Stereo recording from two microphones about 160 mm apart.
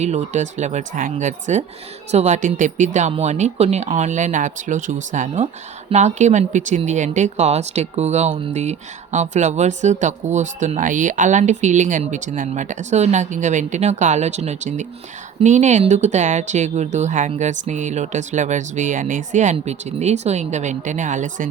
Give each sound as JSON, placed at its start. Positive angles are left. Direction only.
{"t": 0.0, "sound": "speech", "side_deg": -45}